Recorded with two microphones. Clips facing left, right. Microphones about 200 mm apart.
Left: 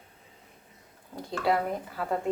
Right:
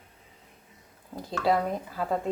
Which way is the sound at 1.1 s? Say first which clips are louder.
Right 1 dB; centre (ahead or behind).